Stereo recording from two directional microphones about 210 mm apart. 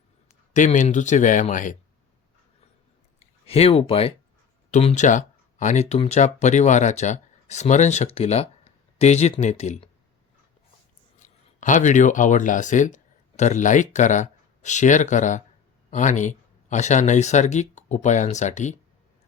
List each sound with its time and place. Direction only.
0.5 s speech: 35° left (ahead or behind)
3.2 s speech: 30° left (ahead or behind)
11.2 s speech: 35° left (ahead or behind)